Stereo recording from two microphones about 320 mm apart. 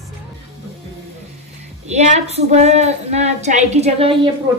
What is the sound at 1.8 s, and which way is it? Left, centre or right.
A woman's voice, right.